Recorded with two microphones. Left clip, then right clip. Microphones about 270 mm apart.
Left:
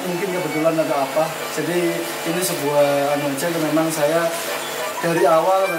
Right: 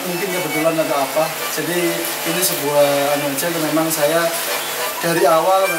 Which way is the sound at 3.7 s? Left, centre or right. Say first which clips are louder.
Right 2 dB; centre.